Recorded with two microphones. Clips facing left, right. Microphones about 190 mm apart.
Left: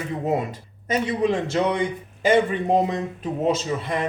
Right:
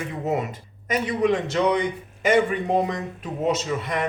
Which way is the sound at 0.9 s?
30° left (ahead or behind).